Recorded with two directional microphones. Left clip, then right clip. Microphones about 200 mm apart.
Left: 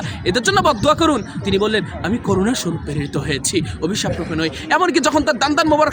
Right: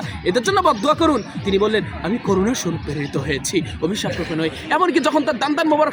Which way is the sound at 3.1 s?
35° left (ahead or behind).